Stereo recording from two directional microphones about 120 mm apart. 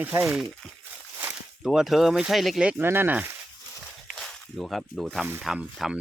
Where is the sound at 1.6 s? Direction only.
Centre (ahead or behind).